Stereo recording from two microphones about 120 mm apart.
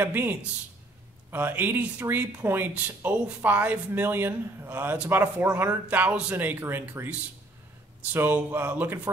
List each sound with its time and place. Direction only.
0.0 s speech: 15° right (ahead or behind)